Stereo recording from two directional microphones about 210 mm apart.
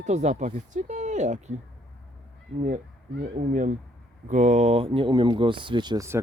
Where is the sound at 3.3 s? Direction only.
35° right (ahead or behind).